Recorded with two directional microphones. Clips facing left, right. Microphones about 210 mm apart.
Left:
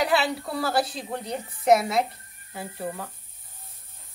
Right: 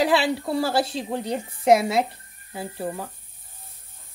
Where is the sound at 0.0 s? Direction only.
30° right (ahead or behind).